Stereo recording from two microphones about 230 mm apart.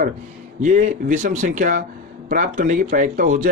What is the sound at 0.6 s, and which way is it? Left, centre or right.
Speech, right.